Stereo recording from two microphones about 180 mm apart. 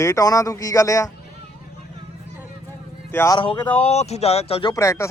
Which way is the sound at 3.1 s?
15° left (ahead or behind).